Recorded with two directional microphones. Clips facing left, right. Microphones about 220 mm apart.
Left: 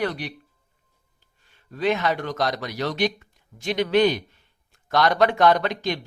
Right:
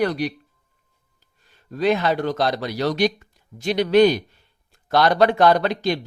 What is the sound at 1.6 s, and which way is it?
Speech, 35° right (ahead or behind).